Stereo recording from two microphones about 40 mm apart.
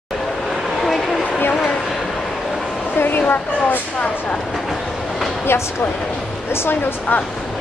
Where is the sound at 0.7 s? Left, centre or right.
Centre.